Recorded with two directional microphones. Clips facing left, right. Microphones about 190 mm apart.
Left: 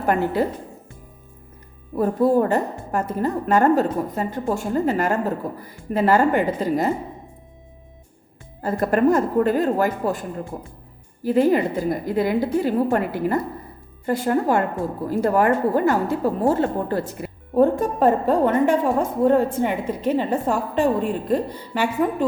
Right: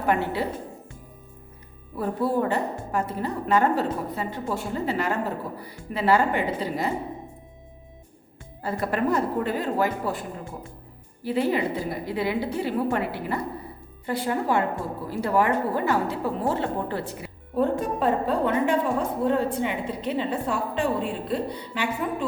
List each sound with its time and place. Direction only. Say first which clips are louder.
0.0 s speech: left 4 dB; 45° left (ahead or behind)
2.0 s a woman's voice: left 7 dB; 45° left (ahead or behind)
8.6 s a woman's voice: left 7 dB; 45° left (ahead or behind)